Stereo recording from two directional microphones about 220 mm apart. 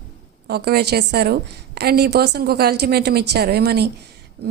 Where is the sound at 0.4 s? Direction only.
45° right (ahead or behind).